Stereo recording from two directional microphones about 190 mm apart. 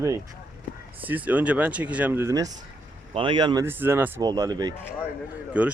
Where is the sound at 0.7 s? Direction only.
45° left (ahead or behind).